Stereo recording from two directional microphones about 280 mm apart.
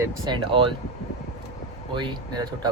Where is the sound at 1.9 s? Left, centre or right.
Centre.